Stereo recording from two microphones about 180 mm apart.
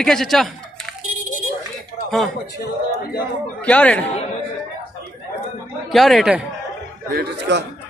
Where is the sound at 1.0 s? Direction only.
45° right (ahead or behind).